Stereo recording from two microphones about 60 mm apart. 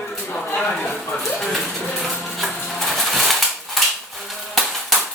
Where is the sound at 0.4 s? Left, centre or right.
Left.